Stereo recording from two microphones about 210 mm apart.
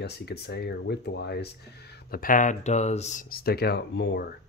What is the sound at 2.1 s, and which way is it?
Speech, 40° left (ahead or behind).